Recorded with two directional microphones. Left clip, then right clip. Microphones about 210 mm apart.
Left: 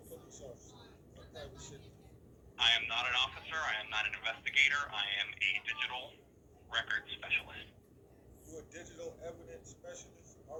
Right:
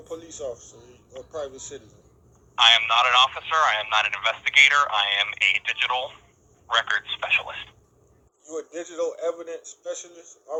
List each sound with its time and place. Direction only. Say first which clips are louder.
0.1 s a man's voice: right 19 dB; 50° right (ahead or behind)